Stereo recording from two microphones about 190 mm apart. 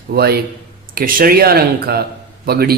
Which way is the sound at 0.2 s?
55° right (ahead or behind).